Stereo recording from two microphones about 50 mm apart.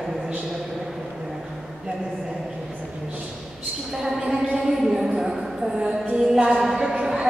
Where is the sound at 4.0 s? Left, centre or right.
Centre.